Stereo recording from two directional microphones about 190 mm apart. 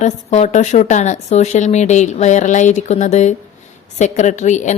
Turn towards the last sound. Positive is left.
turn(degrees=40)  # may be behind; listen again after turning